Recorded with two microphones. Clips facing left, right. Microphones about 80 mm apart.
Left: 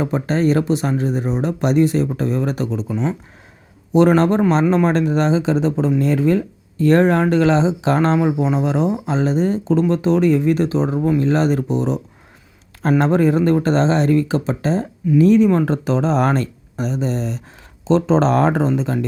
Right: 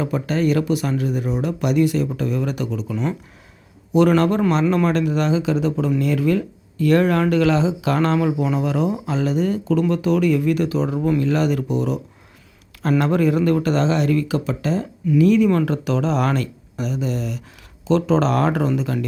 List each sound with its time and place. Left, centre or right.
0.0 s speech: left